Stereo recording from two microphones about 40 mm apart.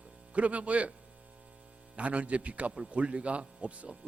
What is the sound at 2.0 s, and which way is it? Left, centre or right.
A man's voice, right.